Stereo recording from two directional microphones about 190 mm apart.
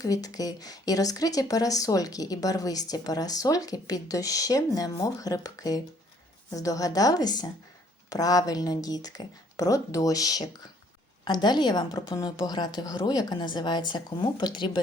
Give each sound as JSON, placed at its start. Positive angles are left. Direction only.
{"t": 0.0, "sound": "speech", "side_deg": 20}